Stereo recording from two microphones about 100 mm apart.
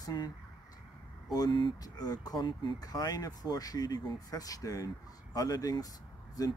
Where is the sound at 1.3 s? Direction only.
45° left (ahead or behind).